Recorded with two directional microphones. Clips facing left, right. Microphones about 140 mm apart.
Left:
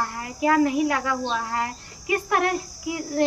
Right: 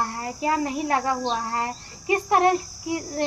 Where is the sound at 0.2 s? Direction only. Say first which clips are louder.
Left 7 dB; 30° right (ahead or behind).